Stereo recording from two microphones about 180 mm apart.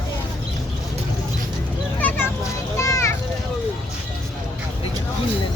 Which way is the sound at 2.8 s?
20° left (ahead or behind).